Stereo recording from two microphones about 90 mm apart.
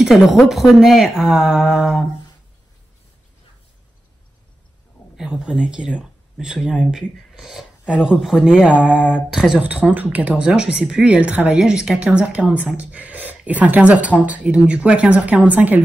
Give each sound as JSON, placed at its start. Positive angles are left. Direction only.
{"t": 0.1, "sound": "speech", "side_deg": 0}
{"t": 5.1, "sound": "speech", "side_deg": -10}